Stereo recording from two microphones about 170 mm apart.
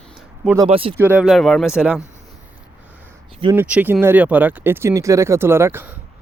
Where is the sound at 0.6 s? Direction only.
35° right (ahead or behind).